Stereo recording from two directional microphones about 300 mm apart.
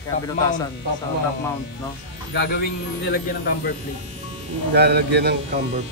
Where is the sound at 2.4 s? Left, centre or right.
Left.